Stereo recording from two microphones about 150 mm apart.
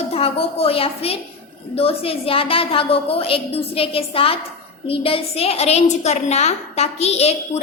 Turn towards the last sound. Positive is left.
turn(degrees=45)  # may be behind; listen again after turning